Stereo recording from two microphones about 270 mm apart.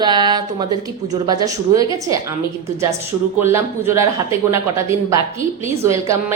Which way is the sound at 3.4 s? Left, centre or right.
Centre.